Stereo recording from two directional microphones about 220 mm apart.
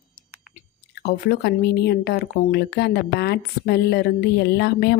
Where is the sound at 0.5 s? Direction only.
50° left (ahead or behind).